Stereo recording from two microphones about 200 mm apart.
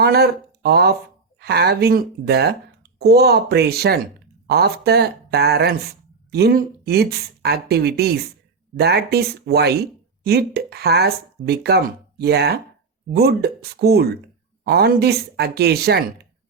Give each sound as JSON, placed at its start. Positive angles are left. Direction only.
{"t": 0.0, "sound": "speech", "side_deg": -50}